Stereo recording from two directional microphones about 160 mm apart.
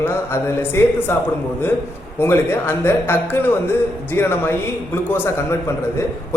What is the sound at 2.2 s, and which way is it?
A man's voice, 15° left (ahead or behind).